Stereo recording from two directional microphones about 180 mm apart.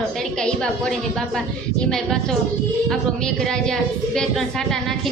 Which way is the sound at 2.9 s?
5° left (ahead or behind).